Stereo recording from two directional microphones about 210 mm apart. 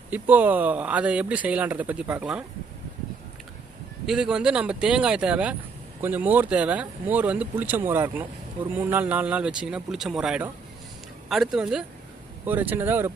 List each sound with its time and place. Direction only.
0.1 s speech: 10° right (ahead or behind)
4.0 s speech: 5° right (ahead or behind)